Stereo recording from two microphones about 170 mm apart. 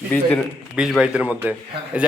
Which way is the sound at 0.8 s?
5° right (ahead or behind).